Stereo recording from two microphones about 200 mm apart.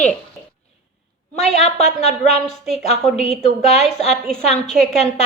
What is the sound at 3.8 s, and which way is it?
Speech, 5° left (ahead or behind).